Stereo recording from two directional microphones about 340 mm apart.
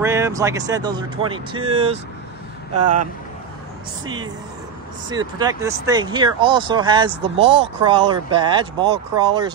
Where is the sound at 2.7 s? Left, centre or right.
Right.